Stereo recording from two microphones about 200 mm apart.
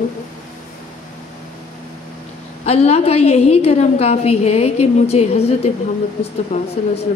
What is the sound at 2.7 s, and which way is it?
A woman's voice, 30° left (ahead or behind).